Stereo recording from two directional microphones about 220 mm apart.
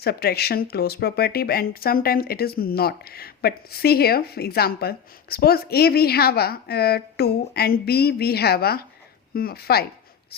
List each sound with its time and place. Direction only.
0.0 s speech: 45° left (ahead or behind)